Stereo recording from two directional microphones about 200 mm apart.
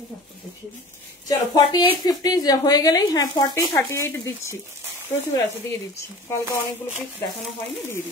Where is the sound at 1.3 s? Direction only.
20° left (ahead or behind).